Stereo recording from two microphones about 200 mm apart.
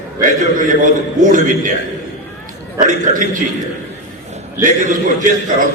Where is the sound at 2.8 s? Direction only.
40° right (ahead or behind).